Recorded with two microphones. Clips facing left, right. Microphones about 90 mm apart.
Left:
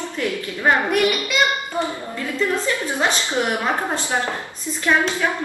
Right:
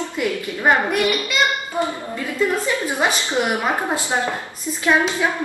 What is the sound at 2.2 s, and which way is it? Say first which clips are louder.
A woman's voice: right 1 dB; 15° right (ahead or behind).